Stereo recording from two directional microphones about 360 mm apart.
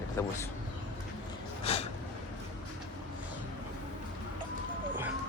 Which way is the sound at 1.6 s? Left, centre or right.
Centre.